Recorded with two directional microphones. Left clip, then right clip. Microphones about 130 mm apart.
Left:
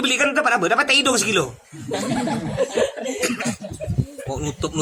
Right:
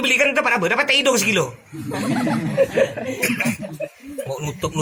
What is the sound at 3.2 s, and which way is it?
Speech, 25° left (ahead or behind).